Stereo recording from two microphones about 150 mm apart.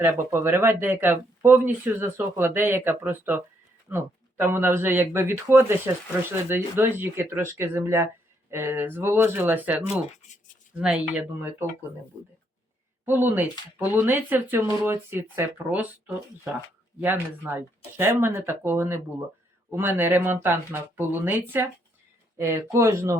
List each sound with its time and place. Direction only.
0.0 s speech: 15° right (ahead or behind)
13.1 s speech: 15° right (ahead or behind)
17.0 s speech: 15° right (ahead or behind)